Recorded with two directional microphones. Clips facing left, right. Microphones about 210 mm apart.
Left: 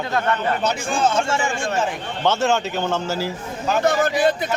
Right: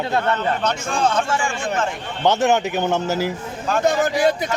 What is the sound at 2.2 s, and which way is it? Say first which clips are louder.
Speech: right 2 dB; 15° right (ahead or behind).